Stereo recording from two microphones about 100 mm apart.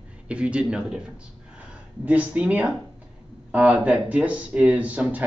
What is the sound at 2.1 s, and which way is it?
Speech, 15° right (ahead or behind).